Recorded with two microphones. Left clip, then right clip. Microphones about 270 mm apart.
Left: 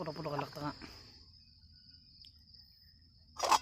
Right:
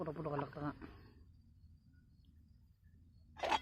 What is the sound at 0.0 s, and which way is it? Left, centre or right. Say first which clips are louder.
Cricket: left 3 dB; left.